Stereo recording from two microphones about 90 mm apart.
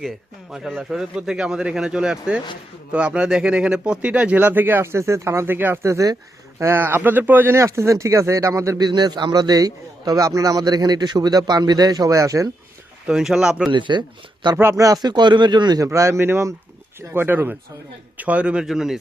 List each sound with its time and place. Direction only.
0.5 s speech: centre (ahead or behind); by 8.8 s 30° right (ahead or behind)
8.8 s a man's voice: 50° right (ahead or behind)
13.1 s speech: 5° right (ahead or behind)
13.7 s speech: 60° right (ahead or behind)
14.5 s speech: 30° right (ahead or behind)
14.8 s a man's voice: 45° right (ahead or behind)
15.8 s speech: 35° right (ahead or behind); by 18.9 s 5° right (ahead or behind)